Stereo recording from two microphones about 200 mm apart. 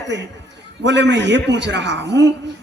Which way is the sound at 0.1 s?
60° right (ahead or behind).